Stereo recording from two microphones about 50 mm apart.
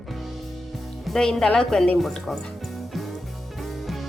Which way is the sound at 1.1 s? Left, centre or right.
Centre.